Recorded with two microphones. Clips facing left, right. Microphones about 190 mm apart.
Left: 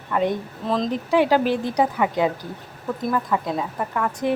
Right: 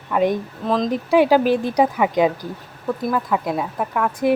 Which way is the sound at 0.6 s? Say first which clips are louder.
Right 3 dB; centre (ahead or behind).